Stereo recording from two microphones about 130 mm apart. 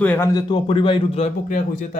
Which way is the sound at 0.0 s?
10° left (ahead or behind).